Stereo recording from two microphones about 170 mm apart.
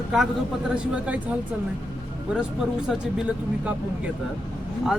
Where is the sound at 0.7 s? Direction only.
5° right (ahead or behind).